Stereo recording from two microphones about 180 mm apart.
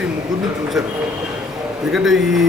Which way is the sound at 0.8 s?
Centre (ahead or behind).